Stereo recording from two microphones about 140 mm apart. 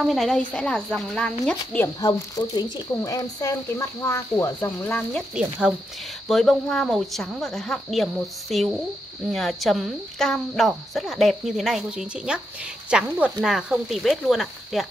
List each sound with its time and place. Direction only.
0.0 s a woman's voice: centre (ahead or behind)
2.0 s speech: 25° left (ahead or behind); by 5.2 s 10° left (ahead or behind)
5.3 s a woman's voice: 5° right (ahead or behind)